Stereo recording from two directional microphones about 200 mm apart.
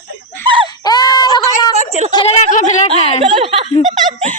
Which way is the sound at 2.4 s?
40° left (ahead or behind).